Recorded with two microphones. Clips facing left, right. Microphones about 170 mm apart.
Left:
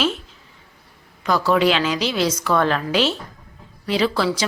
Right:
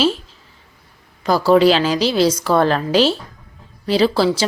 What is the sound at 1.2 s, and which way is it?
Speech, 35° right (ahead or behind).